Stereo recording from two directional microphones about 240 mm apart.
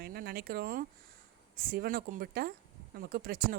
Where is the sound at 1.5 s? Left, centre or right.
Right.